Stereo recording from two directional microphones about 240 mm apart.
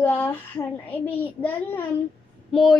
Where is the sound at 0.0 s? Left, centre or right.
Centre.